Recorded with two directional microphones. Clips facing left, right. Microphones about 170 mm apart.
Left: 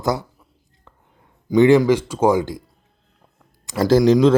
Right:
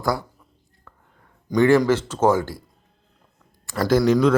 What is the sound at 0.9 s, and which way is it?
Whispering, 20° left (ahead or behind).